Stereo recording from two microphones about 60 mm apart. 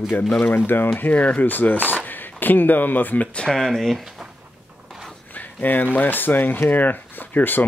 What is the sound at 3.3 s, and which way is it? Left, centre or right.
Speech, centre.